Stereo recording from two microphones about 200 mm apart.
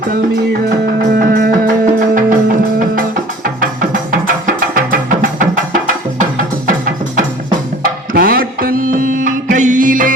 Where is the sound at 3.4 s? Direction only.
40° right (ahead or behind).